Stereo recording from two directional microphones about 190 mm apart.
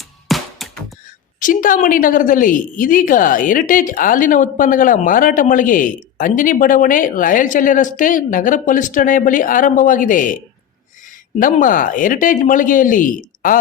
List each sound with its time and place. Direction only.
0.3 s music: centre (ahead or behind)
1.4 s a woman's voice: 45° left (ahead or behind)
11.3 s a woman's voice: 45° left (ahead or behind)